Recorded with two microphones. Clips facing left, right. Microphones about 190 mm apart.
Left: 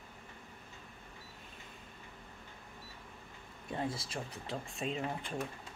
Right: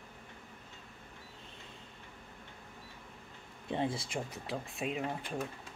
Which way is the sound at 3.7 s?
25° right (ahead or behind).